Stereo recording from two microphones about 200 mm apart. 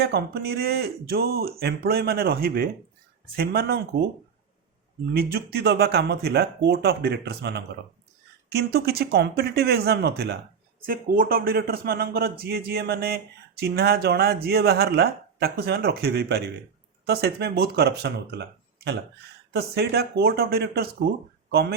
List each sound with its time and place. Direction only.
0.0 s speech: 55° right (ahead or behind)
5.1 s speech: 50° right (ahead or behind)
10.8 s speech: 45° right (ahead or behind)
19.5 s speech: 55° right (ahead or behind)